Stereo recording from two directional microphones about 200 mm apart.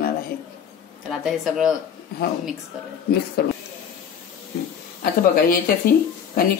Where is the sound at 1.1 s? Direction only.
5° right (ahead or behind).